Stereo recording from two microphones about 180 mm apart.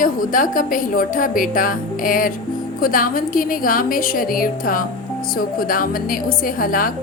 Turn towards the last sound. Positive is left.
turn(degrees=55)  # may be behind; listen again after turning